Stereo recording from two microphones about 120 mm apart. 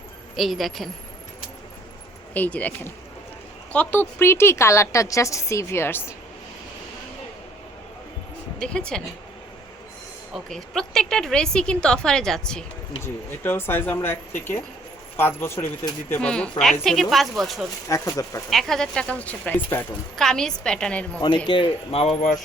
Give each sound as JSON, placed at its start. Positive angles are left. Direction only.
{"t": 0.3, "sound": "speech", "side_deg": 0}
{"t": 2.3, "sound": "a woman's voice", "side_deg": 10}
{"t": 8.5, "sound": "speech", "side_deg": 5}
{"t": 10.3, "sound": "speech", "side_deg": 5}
{"t": 13.0, "sound": "a woman's voice", "side_deg": 20}
{"t": 16.3, "sound": "speech", "side_deg": 5}
{"t": 17.8, "sound": "a woman's voice", "side_deg": 25}
{"t": 18.5, "sound": "speech", "side_deg": 5}
{"t": 21.2, "sound": "speech", "side_deg": 40}